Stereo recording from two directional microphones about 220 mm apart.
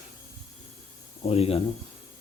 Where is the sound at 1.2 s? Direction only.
25° left (ahead or behind).